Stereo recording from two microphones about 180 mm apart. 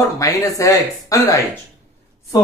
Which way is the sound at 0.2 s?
15° left (ahead or behind).